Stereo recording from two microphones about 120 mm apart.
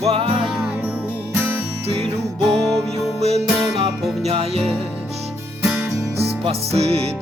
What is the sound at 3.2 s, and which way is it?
Music, 60° right (ahead or behind).